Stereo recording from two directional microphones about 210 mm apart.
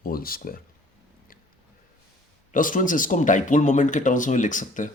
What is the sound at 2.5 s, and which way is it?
Speech, 40° left (ahead or behind).